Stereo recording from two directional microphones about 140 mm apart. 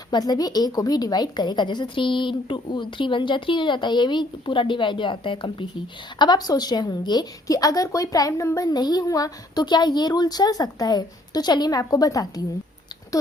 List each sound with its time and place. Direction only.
0.1 s a woman's voice: 30° left (ahead or behind)